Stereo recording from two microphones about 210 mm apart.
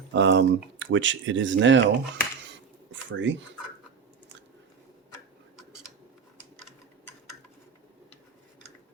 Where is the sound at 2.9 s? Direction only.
60° right (ahead or behind).